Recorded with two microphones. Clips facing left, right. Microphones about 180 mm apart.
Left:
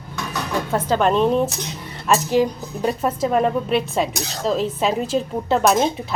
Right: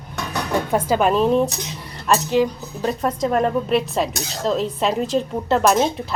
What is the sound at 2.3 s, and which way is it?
A woman's voice, 10° left (ahead or behind).